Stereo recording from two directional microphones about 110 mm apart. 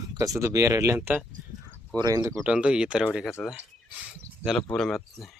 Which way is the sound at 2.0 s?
35° right (ahead or behind).